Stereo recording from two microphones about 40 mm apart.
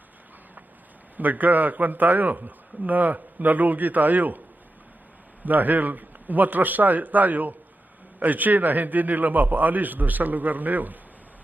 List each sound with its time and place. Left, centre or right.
1.1 s a man's voice: right
5.5 s a man's voice: right